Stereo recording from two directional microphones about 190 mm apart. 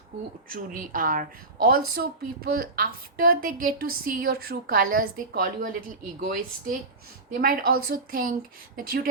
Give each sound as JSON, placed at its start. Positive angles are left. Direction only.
{"t": 0.5, "sound": "a woman's voice", "side_deg": -45}